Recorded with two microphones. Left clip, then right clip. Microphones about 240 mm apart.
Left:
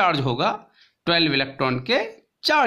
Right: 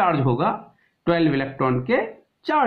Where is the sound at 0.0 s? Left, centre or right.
Left.